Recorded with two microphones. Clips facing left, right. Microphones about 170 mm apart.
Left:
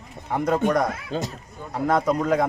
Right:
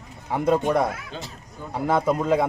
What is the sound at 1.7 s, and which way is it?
Speech, 5° right (ahead or behind).